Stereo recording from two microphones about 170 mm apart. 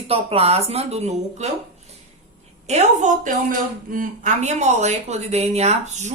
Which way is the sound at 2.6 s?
40° right (ahead or behind).